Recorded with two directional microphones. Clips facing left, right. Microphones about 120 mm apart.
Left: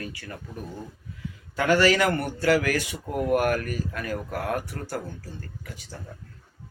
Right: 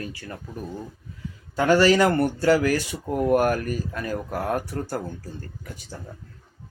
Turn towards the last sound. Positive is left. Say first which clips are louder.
# right 3 dB
turn(degrees=-30)  # may be behind; listen again after turning